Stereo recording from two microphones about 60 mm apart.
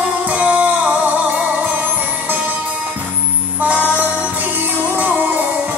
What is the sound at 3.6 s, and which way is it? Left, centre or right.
Music, right.